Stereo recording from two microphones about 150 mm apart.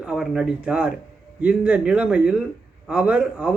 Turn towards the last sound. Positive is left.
turn(degrees=-10)  # may be behind; listen again after turning